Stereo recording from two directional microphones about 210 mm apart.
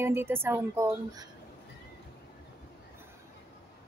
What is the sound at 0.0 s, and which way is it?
A woman's voice, 10° right (ahead or behind).